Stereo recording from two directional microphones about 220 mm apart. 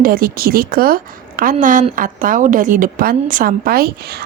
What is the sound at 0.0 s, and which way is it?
A woman's voice, 40° right (ahead or behind).